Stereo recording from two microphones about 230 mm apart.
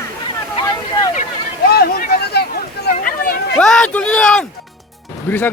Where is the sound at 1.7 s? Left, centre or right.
Left.